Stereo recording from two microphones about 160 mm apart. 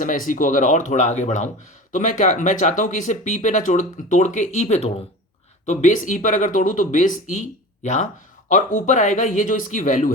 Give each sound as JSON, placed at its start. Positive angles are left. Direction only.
{"t": 0.0, "sound": "speech", "side_deg": 55}